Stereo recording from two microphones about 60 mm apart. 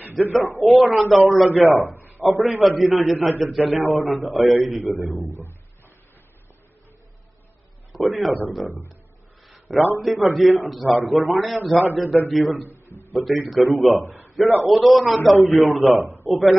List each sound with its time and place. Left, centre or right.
0.0 s speech: right
0.6 s a man's voice: centre
2.0 s a sound: right
2.2 s a man's voice: centre
7.9 s a man's voice: centre
9.5 s a sound: centre
10.0 s a man's voice: centre
12.6 s a sound: right
13.1 s a man's voice: centre